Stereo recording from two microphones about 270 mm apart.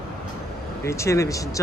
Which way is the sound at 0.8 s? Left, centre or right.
Centre.